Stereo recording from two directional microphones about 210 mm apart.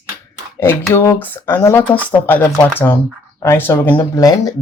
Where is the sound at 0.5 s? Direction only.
10° left (ahead or behind).